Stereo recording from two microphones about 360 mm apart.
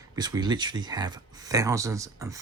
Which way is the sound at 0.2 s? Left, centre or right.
Centre.